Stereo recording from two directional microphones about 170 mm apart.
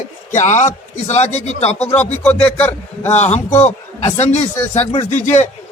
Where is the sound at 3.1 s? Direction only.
40° left (ahead or behind).